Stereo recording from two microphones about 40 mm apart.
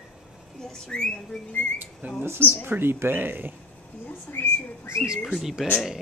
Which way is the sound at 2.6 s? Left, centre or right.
Right.